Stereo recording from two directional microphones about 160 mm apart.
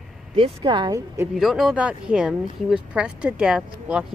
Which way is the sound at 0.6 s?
25° right (ahead or behind).